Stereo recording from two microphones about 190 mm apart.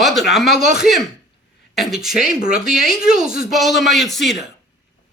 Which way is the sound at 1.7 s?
Centre (ahead or behind).